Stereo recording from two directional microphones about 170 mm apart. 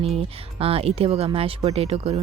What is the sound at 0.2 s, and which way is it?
Speech, 35° right (ahead or behind).